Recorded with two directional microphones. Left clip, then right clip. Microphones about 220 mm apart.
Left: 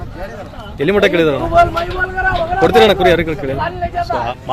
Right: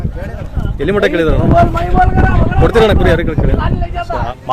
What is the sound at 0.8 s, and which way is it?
Speech, centre (ahead or behind).